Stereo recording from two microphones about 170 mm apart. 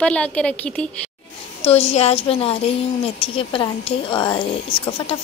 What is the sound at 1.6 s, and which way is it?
A woman's voice, 35° left (ahead or behind).